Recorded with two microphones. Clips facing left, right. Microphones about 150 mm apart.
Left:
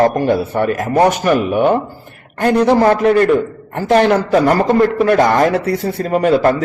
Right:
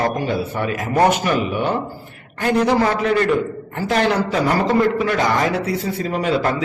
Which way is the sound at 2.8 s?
40° left (ahead or behind).